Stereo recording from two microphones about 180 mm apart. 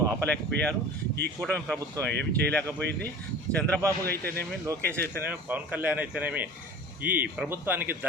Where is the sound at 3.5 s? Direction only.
10° left (ahead or behind).